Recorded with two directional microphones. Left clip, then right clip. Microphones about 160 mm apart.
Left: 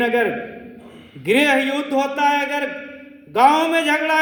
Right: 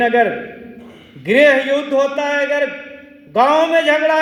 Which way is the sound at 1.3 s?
50° left (ahead or behind).